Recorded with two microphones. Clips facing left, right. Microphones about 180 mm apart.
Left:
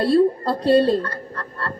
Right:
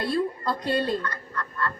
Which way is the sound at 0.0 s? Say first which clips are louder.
Left 9 dB; 35° left (ahead or behind).